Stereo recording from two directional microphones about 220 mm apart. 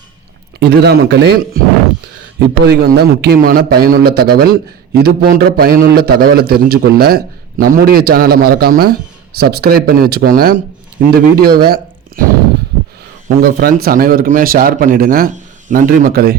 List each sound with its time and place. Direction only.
0.6 s a man's voice: 45° right (ahead or behind)
2.6 s a man's voice: 45° right (ahead or behind)
13.2 s speech: 40° right (ahead or behind)